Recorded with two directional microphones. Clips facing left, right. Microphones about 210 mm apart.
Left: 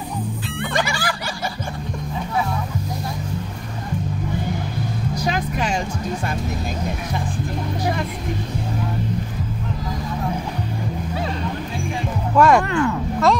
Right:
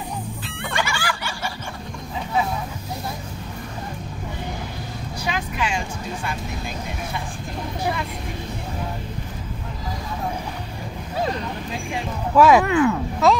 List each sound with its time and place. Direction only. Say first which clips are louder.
0.7 s fowl: left 1 dB; 40° left (ahead or behind)
5.2 s music: left 2 dB; 40° left (ahead or behind)
12.4 s speech: right 1 dB; 5° right (ahead or behind)